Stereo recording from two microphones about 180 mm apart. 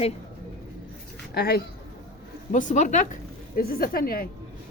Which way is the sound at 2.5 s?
45° left (ahead or behind).